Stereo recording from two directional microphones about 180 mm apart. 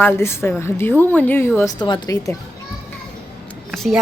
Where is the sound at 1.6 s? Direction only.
20° left (ahead or behind).